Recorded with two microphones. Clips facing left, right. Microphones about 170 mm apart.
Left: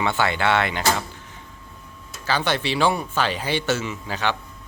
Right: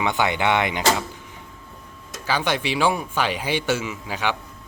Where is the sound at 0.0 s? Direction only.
15° right (ahead or behind).